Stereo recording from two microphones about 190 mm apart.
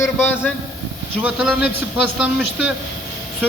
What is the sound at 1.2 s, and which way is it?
A man's voice, 5° right (ahead or behind).